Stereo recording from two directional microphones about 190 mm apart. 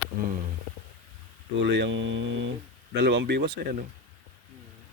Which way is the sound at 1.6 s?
65° right (ahead or behind).